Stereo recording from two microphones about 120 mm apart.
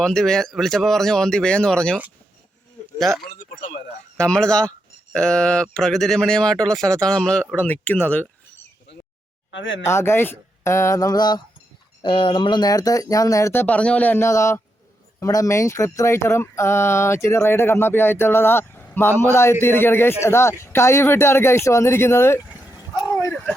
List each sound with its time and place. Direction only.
0.0 s speech: 5° left (ahead or behind)
3.0 s speech: centre (ahead or behind)
9.8 s speech: 20° left (ahead or behind)
12.0 s speech: 45° left (ahead or behind); by 22.4 s 25° left (ahead or behind)
23.0 s a sound: 25° left (ahead or behind)